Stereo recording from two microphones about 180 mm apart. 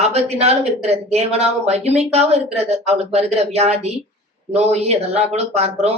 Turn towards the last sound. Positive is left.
turn(degrees=-35)  # may be behind; listen again after turning